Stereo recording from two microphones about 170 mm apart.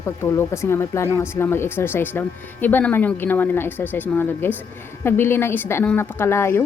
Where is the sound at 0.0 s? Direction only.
15° left (ahead or behind).